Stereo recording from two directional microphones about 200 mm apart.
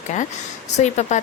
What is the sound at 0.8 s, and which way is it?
Speech, 35° left (ahead or behind).